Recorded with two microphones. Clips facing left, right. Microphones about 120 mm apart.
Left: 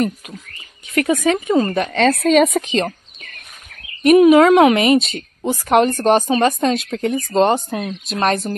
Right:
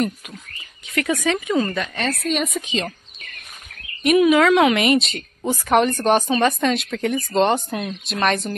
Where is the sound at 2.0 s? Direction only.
90° left; by 2.8 s 75° left (ahead or behind).